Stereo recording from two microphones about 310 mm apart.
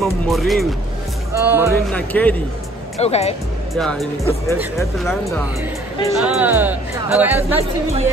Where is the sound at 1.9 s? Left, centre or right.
Centre.